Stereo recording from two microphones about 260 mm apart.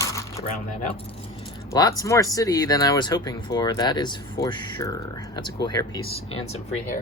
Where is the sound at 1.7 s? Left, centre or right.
Centre.